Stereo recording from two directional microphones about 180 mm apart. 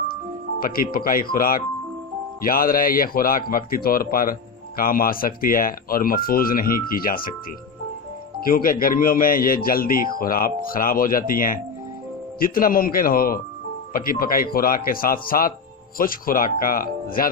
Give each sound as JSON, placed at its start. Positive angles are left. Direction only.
{"t": 0.6, "sound": "a man's voice", "side_deg": 55}
{"t": 8.4, "sound": "a man's voice", "side_deg": 50}